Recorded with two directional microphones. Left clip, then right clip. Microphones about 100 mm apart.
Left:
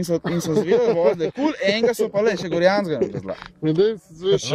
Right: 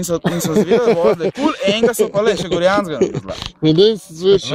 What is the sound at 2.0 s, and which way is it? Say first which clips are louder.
Speech: right 6 dB; 50° right (ahead or behind).